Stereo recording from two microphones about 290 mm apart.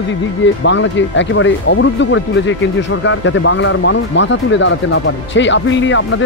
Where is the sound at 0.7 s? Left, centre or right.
Left.